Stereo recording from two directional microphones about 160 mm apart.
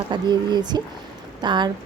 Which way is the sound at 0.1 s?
25° right (ahead or behind).